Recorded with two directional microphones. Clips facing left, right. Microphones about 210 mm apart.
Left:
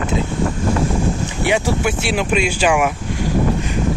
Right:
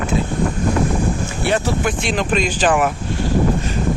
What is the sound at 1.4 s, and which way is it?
Speech, 10° left (ahead or behind).